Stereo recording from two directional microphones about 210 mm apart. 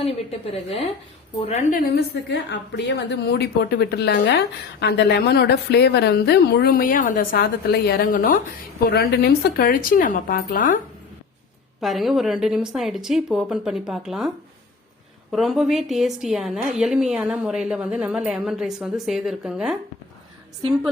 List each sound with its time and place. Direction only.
0.0 s a woman's voice: 30° left (ahead or behind)
2.5 s a woman's voice: 55° left (ahead or behind)
11.8 s a woman's voice: centre (ahead or behind)